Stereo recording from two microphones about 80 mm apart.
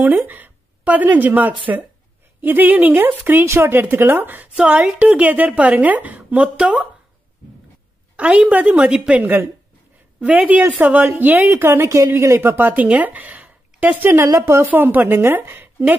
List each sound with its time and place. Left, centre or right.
0.3 s a woman's voice: right
8.2 s a woman's voice: centre